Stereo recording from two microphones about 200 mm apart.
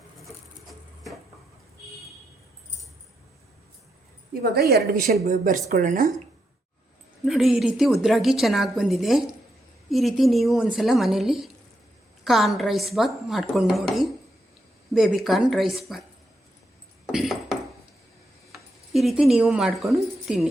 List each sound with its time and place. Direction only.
4.5 s a woman's voice: 55° right (ahead or behind)
5.2 s speech: 40° right (ahead or behind)
7.3 s speech: centre (ahead or behind)
17.1 s a sound: centre (ahead or behind)
18.5 s speech: centre (ahead or behind)